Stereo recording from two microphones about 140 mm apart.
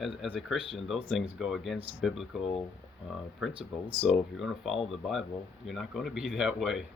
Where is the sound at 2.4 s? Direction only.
40° left (ahead or behind).